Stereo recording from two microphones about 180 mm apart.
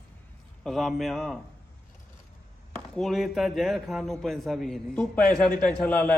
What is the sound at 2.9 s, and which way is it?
A man's voice, centre (ahead or behind).